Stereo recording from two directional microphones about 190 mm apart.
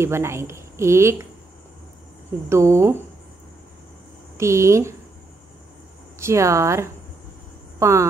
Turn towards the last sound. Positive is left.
turn(degrees=-15)  # may be behind; listen again after turning